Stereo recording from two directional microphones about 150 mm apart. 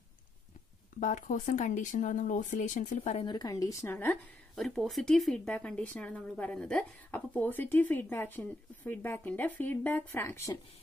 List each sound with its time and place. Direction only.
0.9 s speech: 60° left (ahead or behind)
3.3 s speech: 25° left (ahead or behind)
4.6 s speech: centre (ahead or behind)